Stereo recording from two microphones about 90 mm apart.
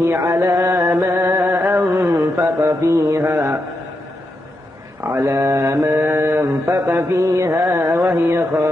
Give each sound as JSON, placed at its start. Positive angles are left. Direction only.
{"t": 0.0, "sound": "mantra", "side_deg": -30}
{"t": 0.8, "sound": "music", "side_deg": -25}
{"t": 2.0, "sound": "mantra", "side_deg": -30}
{"t": 5.0, "sound": "mantra", "side_deg": -30}